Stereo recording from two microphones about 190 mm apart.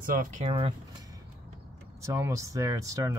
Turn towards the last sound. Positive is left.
turn(degrees=-15)  # may be behind; listen again after turning